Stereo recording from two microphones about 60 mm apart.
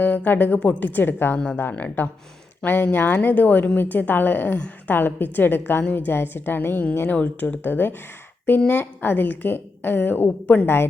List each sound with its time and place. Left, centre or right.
0.0 s a woman's voice: left